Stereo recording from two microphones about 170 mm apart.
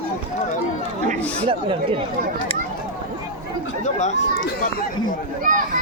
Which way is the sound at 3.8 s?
40° left (ahead or behind).